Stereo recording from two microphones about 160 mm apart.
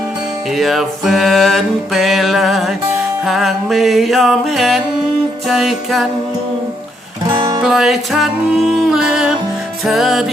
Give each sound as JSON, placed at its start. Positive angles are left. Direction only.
{"t": 0.5, "sound": "music", "side_deg": 0}
{"t": 7.3, "sound": "music", "side_deg": -20}
{"t": 7.6, "sound": "music", "side_deg": 0}